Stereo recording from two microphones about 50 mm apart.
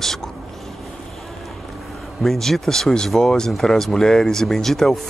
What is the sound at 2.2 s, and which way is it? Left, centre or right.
Speech, centre.